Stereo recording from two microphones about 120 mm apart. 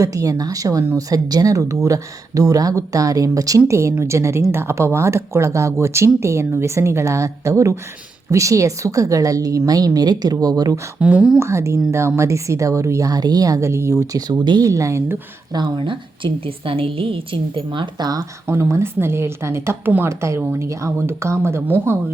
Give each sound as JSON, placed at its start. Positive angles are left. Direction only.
{"t": 0.0, "sound": "a woman's voice", "side_deg": -30}
{"t": 11.0, "sound": "speech", "side_deg": -10}
{"t": 11.3, "sound": "a woman's voice", "side_deg": -25}
{"t": 15.5, "sound": "a woman's voice", "side_deg": -40}
{"t": 18.4, "sound": "a woman's voice", "side_deg": -25}